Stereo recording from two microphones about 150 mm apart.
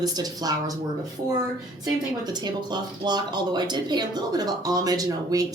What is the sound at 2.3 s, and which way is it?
Speech, 30° right (ahead or behind).